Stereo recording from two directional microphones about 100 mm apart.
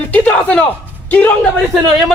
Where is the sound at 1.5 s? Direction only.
5° left (ahead or behind).